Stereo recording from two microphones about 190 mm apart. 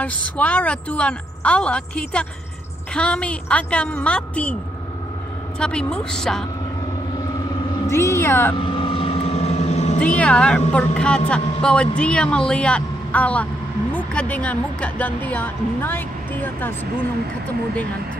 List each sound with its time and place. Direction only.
0.0 s a woman's voice: 5° left (ahead or behind)
5.6 s a woman's voice: 5° left (ahead or behind)
7.9 s speech: 15° left (ahead or behind)
8.5 s vehicle: 25° left (ahead or behind)
9.9 s a woman's voice: 5° left (ahead or behind)